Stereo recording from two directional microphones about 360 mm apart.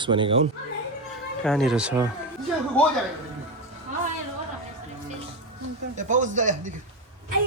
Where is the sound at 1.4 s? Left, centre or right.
Centre.